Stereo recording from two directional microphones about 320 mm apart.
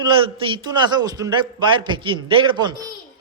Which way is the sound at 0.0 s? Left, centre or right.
Centre.